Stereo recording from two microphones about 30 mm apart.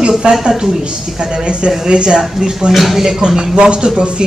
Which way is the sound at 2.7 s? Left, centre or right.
Centre.